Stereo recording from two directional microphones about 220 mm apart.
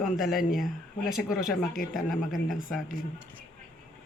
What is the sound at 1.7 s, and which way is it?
Speech, 40° left (ahead or behind).